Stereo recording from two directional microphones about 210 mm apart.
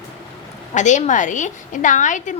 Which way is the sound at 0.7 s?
35° left (ahead or behind).